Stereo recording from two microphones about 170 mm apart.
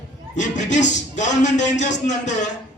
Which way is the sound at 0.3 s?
45° left (ahead or behind).